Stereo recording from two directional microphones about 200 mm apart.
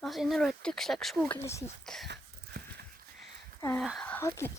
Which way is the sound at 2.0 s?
55° right (ahead or behind).